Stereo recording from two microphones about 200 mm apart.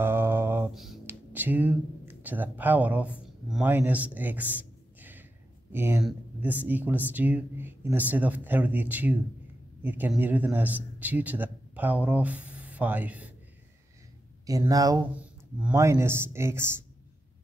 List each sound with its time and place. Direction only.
0.0 s a sound: 10° right (ahead or behind)
5.7 s a man's voice: 10° right (ahead or behind)
14.4 s speech: 15° right (ahead or behind)